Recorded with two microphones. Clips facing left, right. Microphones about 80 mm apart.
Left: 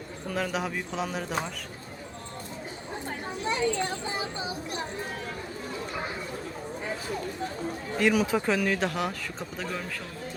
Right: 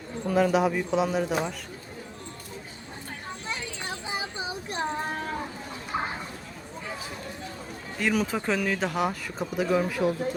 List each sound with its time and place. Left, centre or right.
0.3 s speech: centre
3.5 s child singing: centre; by 5.3 s right
7.9 s speech: centre